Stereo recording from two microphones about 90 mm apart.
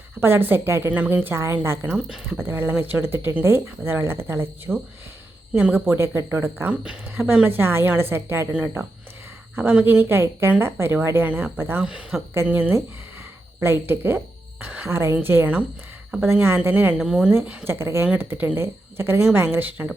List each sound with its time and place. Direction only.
0.2 s a woman's voice: 25° right (ahead or behind)
2.0 s speech: 10° right (ahead or behind)
2.4 s a woman's voice: 25° right (ahead or behind)
11.8 s speech: 10° right (ahead or behind)
12.5 s a woman's voice: 20° right (ahead or behind)
17.0 s speech: 10° right (ahead or behind)
17.3 s a woman's voice: 25° right (ahead or behind)